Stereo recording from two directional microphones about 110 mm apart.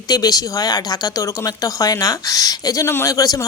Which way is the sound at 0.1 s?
35° left (ahead or behind).